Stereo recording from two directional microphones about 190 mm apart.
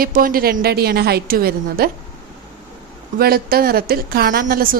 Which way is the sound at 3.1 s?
55° right (ahead or behind).